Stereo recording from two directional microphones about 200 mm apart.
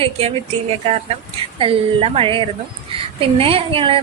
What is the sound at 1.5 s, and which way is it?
A woman's voice, 25° right (ahead or behind).